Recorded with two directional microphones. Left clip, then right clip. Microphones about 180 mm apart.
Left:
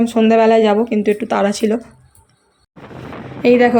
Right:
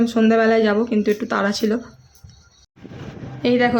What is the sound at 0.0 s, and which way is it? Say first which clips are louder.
A woman's voice: left 4 dB; 10° left (ahead or behind).